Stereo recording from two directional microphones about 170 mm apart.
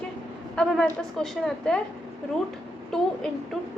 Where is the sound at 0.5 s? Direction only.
5° left (ahead or behind).